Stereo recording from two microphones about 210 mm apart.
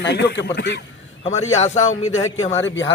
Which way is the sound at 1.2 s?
30° left (ahead or behind).